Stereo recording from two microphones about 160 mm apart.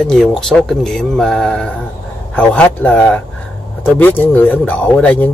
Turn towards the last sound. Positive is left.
turn(degrees=10)  # may be behind; listen again after turning